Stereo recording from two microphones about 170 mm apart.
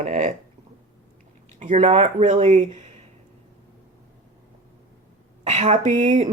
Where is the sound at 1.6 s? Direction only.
40° right (ahead or behind).